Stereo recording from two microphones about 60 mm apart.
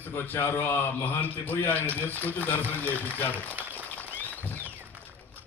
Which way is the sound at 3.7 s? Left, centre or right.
Left.